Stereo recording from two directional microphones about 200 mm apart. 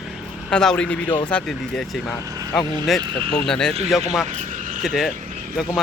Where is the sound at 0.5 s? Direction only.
5° left (ahead or behind).